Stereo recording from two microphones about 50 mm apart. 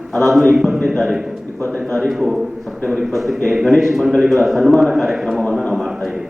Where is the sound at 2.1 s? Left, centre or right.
Centre.